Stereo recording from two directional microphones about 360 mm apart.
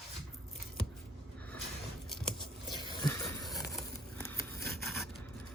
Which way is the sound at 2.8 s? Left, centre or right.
Centre.